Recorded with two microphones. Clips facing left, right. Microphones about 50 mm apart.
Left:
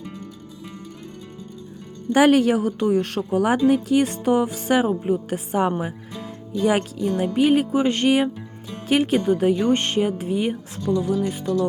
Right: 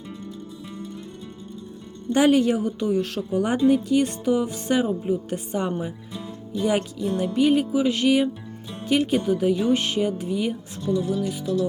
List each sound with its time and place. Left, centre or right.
2.1 s a woman's voice: left
6.1 s music: left